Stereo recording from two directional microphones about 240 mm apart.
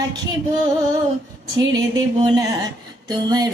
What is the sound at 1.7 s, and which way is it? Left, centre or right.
Female singing, centre.